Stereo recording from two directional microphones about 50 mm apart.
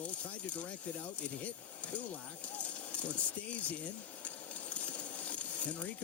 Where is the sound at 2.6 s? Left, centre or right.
Left.